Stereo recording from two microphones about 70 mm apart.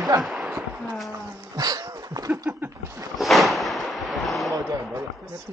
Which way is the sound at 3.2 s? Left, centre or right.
Centre.